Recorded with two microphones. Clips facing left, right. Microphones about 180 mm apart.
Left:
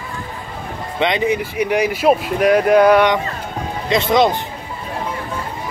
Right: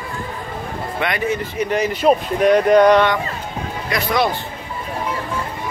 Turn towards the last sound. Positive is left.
turn(degrees=20)  # may be behind; listen again after turning